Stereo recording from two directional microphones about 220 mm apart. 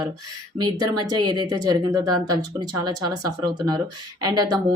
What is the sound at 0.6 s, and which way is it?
Speech, 20° right (ahead or behind).